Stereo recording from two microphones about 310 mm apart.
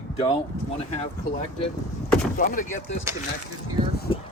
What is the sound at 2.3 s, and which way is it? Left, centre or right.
Speech, left.